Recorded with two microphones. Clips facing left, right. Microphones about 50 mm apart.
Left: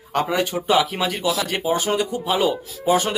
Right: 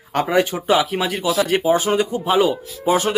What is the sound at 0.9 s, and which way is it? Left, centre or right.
Speech, centre.